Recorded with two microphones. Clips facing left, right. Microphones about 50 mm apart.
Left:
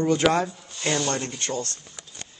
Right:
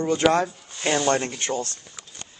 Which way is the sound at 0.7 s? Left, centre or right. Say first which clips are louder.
Right 4 dB; right.